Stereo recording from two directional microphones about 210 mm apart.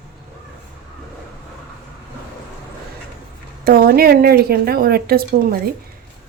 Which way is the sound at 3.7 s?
45° right (ahead or behind).